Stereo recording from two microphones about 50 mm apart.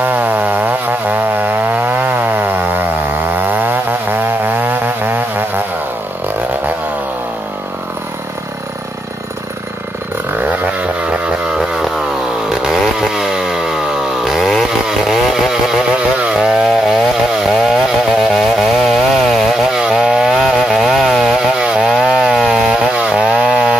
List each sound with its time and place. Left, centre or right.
0.0 s chainsaw: right
10.6 s vehicle: right
12.4 s chainsaw: centre
19.8 s chainsaw: centre
22.7 s chainsaw: right